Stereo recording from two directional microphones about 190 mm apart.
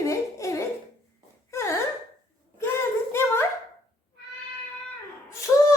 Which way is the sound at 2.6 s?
15° left (ahead or behind).